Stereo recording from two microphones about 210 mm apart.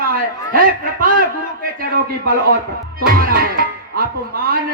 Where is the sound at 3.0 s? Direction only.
45° right (ahead or behind).